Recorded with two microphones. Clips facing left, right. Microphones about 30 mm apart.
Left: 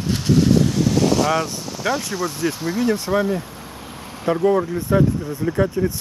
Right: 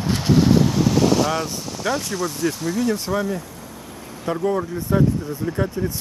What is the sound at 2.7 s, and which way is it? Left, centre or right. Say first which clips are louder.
Speech: left 4 dB; left.